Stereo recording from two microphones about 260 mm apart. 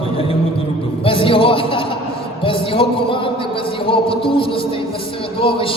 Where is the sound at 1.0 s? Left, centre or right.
Centre.